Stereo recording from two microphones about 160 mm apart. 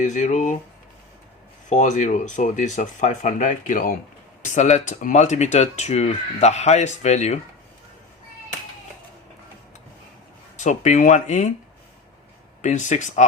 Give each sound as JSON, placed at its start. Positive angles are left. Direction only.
{"t": 0.0, "sound": "speech", "side_deg": 50}
{"t": 1.7, "sound": "speech", "side_deg": 50}
{"t": 10.6, "sound": "speech", "side_deg": 50}
{"t": 12.6, "sound": "speech", "side_deg": 50}